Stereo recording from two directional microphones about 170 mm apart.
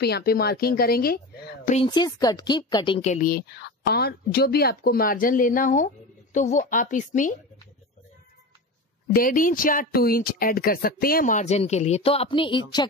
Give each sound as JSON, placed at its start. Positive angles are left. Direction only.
{"t": 0.0, "sound": "a woman's voice", "side_deg": 65}
{"t": 1.9, "sound": "a woman's voice", "side_deg": 25}
{"t": 3.0, "sound": "a woman's voice", "side_deg": 50}
{"t": 9.1, "sound": "speech", "side_deg": 55}